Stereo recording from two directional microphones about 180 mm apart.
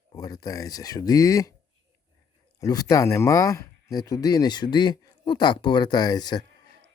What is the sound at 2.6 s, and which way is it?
Speech, 20° left (ahead or behind).